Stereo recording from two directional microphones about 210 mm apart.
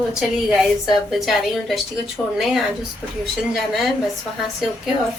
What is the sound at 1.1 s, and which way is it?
A woman's voice, centre (ahead or behind).